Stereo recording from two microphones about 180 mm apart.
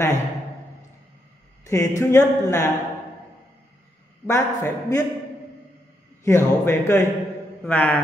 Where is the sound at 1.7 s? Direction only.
15° left (ahead or behind).